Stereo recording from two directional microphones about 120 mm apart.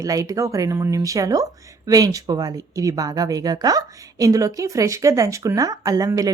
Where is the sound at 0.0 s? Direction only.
30° right (ahead or behind).